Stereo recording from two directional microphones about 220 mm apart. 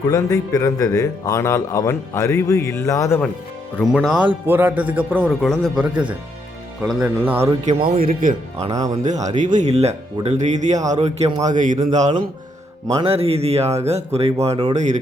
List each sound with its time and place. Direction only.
0.1 s speech: 15° left (ahead or behind)
3.9 s a man's voice: 5° right (ahead or behind)
7.6 s speech: 25° right (ahead or behind)
8.0 s speech: 40° right (ahead or behind)
8.6 s a man's voice: 15° right (ahead or behind)
9.0 s speech: 35° right (ahead or behind)